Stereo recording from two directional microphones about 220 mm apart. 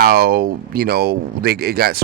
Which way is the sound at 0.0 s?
45° right (ahead or behind).